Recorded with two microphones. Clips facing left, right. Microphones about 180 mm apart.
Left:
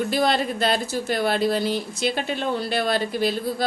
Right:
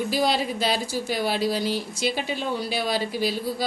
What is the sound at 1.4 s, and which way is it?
Speech, 55° left (ahead or behind).